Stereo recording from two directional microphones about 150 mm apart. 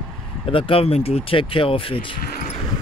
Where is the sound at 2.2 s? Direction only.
80° left.